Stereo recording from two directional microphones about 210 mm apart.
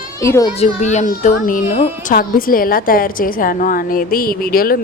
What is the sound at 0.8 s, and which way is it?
A woman's voice, 35° left (ahead or behind).